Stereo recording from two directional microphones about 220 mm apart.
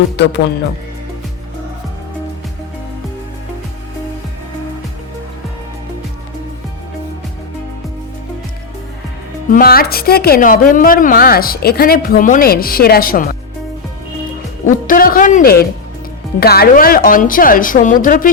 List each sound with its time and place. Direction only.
0.2 s speech: 55° left (ahead or behind)
9.5 s speech: 40° left (ahead or behind)
14.6 s speech: 40° left (ahead or behind)